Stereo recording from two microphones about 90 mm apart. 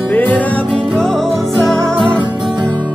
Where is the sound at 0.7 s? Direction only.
5° left (ahead or behind).